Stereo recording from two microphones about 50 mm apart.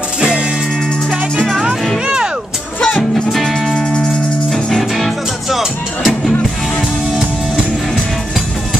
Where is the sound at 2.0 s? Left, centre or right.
Centre.